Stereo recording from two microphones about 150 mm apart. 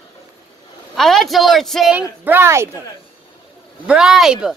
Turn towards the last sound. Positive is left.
turn(degrees=-5)  # may be behind; listen again after turning